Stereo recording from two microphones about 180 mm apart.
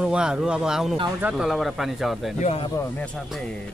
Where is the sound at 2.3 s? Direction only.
35° left (ahead or behind).